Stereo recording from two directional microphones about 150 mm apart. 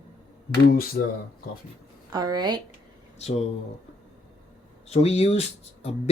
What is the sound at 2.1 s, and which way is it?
Speech, 25° right (ahead or behind).